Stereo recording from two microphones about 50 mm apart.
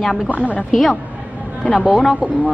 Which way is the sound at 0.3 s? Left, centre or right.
Left.